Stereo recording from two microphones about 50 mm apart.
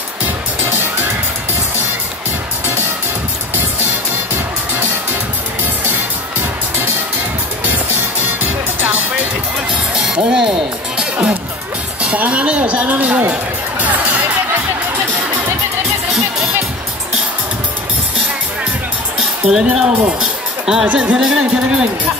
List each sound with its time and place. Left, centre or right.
8.4 s music: right
9.9 s music: centre
12.0 s speech: right
13.3 s music: right
19.1 s music: centre
20.8 s speech: right